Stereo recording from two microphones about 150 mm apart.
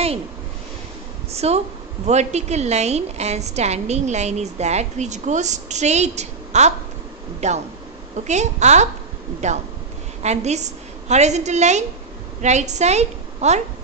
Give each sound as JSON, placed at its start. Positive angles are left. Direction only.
{"t": 1.3, "sound": "a woman's voice", "side_deg": -45}